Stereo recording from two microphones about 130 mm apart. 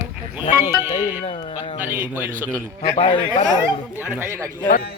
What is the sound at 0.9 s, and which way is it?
Speech, 45° left (ahead or behind).